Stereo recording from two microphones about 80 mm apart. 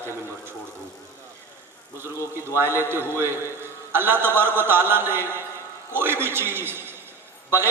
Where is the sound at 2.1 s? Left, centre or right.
Left.